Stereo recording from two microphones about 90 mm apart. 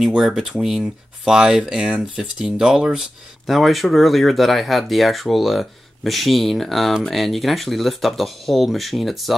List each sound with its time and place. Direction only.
0.0 s speech: 5° right (ahead or behind)